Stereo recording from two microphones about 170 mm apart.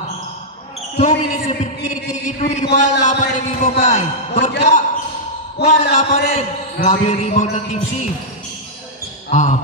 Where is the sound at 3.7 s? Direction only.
45° left (ahead or behind).